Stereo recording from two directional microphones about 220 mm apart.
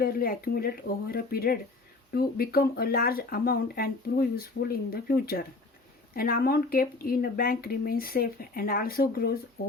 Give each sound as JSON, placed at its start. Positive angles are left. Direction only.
{"t": 0.0, "sound": "speech", "side_deg": 40}